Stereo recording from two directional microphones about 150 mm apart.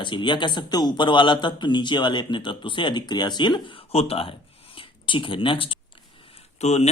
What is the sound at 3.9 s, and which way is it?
Speech, 40° left (ahead or behind).